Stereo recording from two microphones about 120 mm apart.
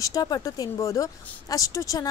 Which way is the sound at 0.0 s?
30° left (ahead or behind).